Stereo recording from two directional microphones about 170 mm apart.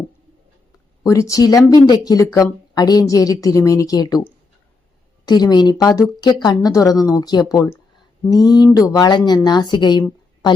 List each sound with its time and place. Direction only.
1.0 s speech: 20° left (ahead or behind)